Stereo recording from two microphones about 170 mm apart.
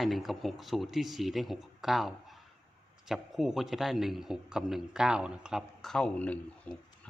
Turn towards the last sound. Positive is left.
turn(degrees=10)  # may be behind; listen again after turning